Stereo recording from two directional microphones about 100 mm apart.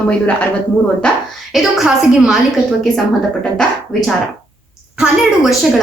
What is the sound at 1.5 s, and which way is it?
Speech, 5° right (ahead or behind).